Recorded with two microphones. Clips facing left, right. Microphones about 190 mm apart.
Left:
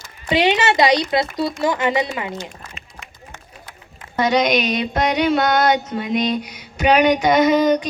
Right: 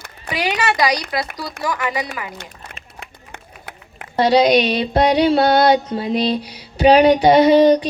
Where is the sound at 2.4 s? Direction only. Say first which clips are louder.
Left 4 dB; 65° right (ahead or behind).